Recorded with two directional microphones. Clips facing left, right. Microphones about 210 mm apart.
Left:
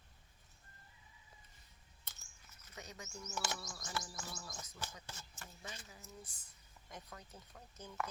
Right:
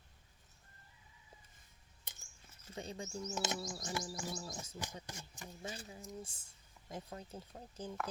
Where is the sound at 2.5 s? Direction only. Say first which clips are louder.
Right 8 dB; 30° right (ahead or behind).